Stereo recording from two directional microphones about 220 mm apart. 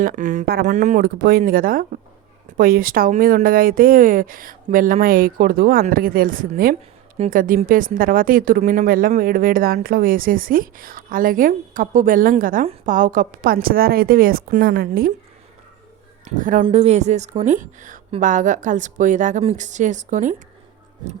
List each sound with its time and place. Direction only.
0.0 s speech: 35° right (ahead or behind)
16.4 s speech: 35° right (ahead or behind)